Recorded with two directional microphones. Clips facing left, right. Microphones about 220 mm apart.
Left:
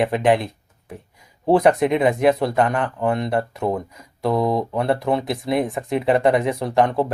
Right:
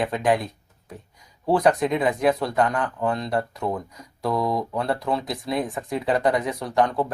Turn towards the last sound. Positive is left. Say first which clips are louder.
# left 3 dB
turn(degrees=25)  # may be behind; listen again after turning